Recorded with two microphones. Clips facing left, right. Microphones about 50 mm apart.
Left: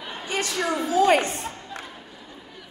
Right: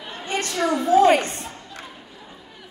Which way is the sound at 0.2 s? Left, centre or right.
Right.